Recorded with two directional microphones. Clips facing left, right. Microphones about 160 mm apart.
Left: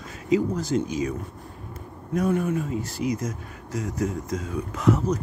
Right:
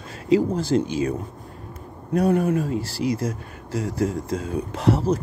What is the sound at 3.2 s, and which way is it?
Speech, 30° right (ahead or behind).